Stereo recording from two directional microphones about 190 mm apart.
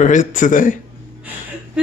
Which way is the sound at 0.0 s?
40° left (ahead or behind).